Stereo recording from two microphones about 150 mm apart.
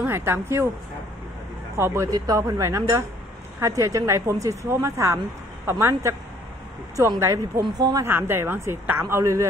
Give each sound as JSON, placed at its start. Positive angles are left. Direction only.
{"t": 0.0, "sound": "speech", "side_deg": -15}
{"t": 1.8, "sound": "a woman's voice", "side_deg": -15}
{"t": 8.1, "sound": "a woman's voice", "side_deg": -15}